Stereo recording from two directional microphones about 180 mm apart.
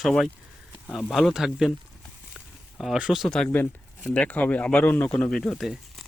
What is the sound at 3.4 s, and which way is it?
Speech, 15° left (ahead or behind).